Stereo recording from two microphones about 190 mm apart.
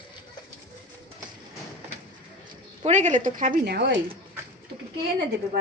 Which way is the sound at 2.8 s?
40° right (ahead or behind).